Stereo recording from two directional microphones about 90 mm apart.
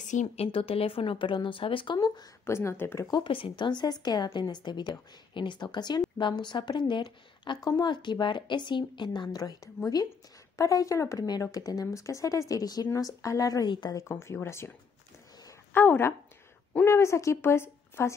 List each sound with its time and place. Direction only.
0.4 s speech: 90° left; by 2.0 s 75° left (ahead or behind)
2.0 s a woman's voice: 45° left (ahead or behind)
2.4 s a woman's voice: 30° left (ahead or behind)
3.3 s a woman's voice: 80° left; by 9.4 s 60° left (ahead or behind)
9.4 s a woman's voice: 40° left (ahead or behind)
13.7 s a woman's voice: 60° left (ahead or behind)
14.0 s speech: 30° left (ahead or behind)
15.7 s a woman's voice: 20° left (ahead or behind)